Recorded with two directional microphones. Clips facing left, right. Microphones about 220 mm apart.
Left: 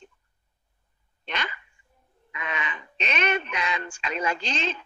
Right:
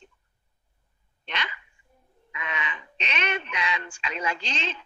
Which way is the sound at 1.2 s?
45° left (ahead or behind).